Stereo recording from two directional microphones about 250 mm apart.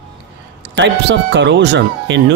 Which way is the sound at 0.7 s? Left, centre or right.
Right.